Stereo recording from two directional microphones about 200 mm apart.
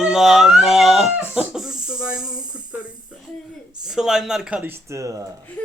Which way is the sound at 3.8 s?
Centre (ahead or behind).